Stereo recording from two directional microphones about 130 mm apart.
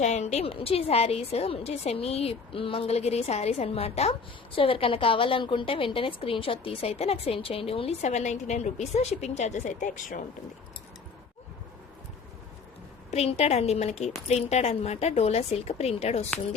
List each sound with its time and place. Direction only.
0.0 s a woman's voice: 60° left (ahead or behind); by 10.2 s 90° left
13.1 s speech: 55° left (ahead or behind)